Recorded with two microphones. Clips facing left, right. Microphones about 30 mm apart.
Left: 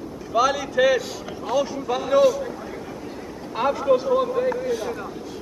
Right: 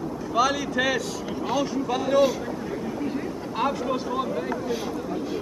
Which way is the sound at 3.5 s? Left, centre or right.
Centre.